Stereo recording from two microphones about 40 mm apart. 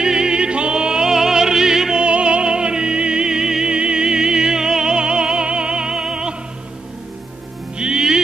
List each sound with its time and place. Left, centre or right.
0.0 s music: centre
2.0 s music: right
7.7 s music: centre